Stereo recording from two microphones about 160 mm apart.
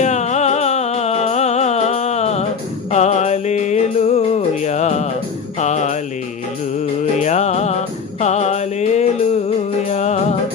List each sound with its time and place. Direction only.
0.0 s music: 45° left (ahead or behind)
5.5 s jingle bell: 45° left (ahead or behind)
7.2 s music: 45° left (ahead or behind)